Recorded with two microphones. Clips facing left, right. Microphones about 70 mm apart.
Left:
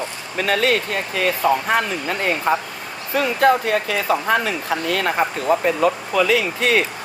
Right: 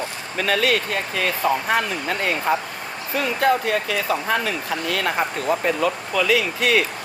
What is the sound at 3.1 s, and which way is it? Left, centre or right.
Speech, left.